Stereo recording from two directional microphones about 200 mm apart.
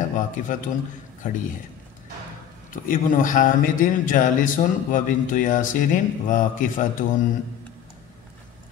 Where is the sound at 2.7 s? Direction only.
40° left (ahead or behind).